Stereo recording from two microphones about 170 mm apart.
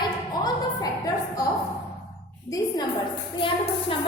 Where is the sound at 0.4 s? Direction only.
20° left (ahead or behind).